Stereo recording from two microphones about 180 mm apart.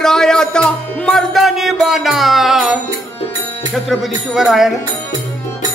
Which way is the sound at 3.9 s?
Centre (ahead or behind).